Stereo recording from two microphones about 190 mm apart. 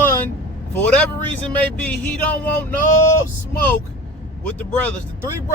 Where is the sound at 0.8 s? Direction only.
5° left (ahead or behind).